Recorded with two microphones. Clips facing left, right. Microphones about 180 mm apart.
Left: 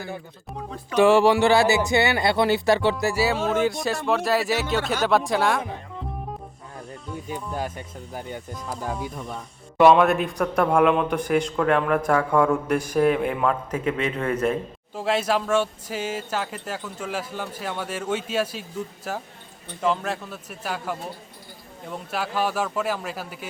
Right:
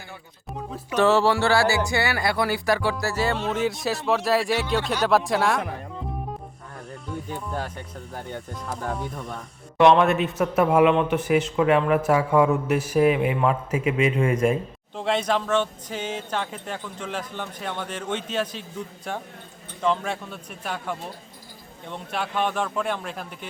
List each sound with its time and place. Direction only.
0.9 s speech: 15° left (ahead or behind)
3.0 s a man's voice: 10° left (ahead or behind)
7.3 s a man's voice: 10° left (ahead or behind); by 14.6 s 10° right (ahead or behind)
14.9 s a man's voice: 5° left (ahead or behind)